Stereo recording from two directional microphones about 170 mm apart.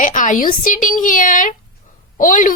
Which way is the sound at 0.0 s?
50° left (ahead or behind).